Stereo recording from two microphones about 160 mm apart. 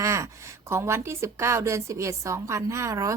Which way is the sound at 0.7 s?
15° right (ahead or behind).